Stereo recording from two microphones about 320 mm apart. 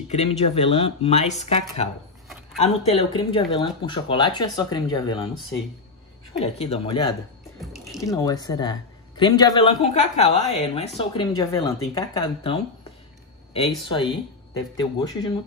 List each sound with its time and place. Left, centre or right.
0.1 s speech: centre
6.3 s speech: centre
7.6 s music: centre
8.0 s speech: centre
13.8 s speech: centre